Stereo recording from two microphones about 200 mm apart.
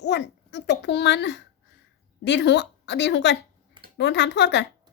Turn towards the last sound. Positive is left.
turn(degrees=60)  # may be behind; listen again after turning